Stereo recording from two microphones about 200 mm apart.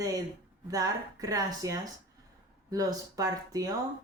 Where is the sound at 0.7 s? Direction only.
20° right (ahead or behind).